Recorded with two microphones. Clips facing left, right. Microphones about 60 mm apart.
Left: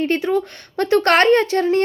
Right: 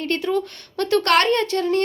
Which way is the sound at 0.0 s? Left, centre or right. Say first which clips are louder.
Left 4 dB; left.